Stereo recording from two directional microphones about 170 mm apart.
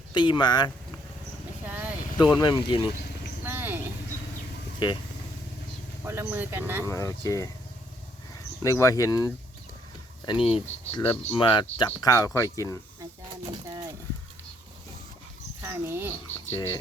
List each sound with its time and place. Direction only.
0.1 s speech: 25° left (ahead or behind)
1.6 s vehicle: 10° right (ahead or behind)
2.1 s speech: 25° left (ahead or behind)
3.4 s a sound: 10° right (ahead or behind)
6.1 s speech: 15° right (ahead or behind)
6.8 s speech: 20° left (ahead or behind)
8.6 s speech: 15° left (ahead or behind)
10.2 s speech: 30° left (ahead or behind)
13.7 s horse: 20° right (ahead or behind)
15.6 s speech: 15° right (ahead or behind)
16.2 s speech: 20° left (ahead or behind)